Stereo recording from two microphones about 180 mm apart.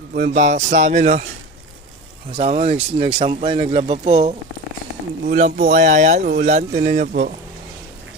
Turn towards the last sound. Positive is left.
turn(degrees=-45)  # may be behind; listen again after turning